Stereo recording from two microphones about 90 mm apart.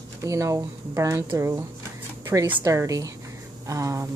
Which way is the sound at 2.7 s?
35° right (ahead or behind).